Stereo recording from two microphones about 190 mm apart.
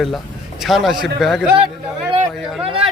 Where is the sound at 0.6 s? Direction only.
Centre (ahead or behind).